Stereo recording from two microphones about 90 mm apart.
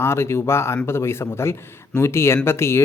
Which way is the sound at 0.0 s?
30° left (ahead or behind).